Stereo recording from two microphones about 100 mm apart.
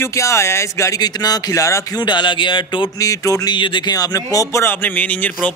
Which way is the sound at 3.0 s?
35° left (ahead or behind).